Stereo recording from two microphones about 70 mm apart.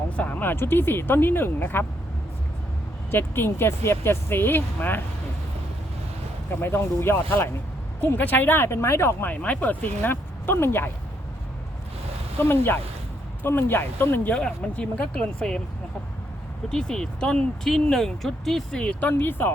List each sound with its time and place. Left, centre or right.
0.2 s speech: left
3.1 s speech: left
6.6 s speech: left
9.2 s speech: left
12.4 s speech: left
14.3 s speech: centre
16.6 s speech: centre; by 19.5 s left